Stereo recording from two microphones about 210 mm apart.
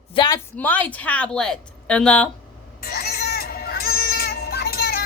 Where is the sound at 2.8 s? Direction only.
45° left (ahead or behind).